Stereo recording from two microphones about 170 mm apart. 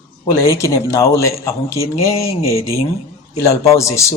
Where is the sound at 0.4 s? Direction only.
15° left (ahead or behind).